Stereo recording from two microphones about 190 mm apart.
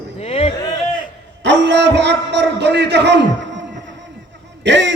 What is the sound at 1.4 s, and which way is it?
A man's voice, 65° right (ahead or behind).